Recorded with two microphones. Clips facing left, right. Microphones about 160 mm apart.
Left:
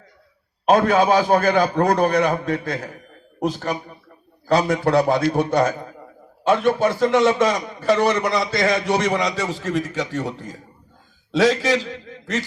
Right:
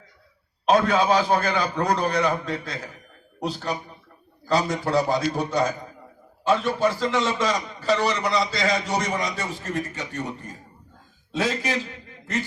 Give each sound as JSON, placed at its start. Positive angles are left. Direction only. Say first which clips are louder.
{"t": 0.7, "sound": "a man's voice", "louder": "left 4 dB", "side_deg": 55}